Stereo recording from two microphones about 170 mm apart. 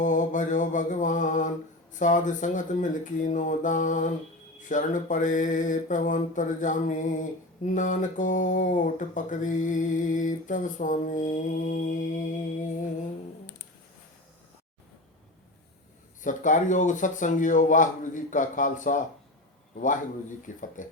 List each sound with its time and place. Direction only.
0.0 s mantra: 50° left (ahead or behind)
16.2 s mantra: 50° left (ahead or behind)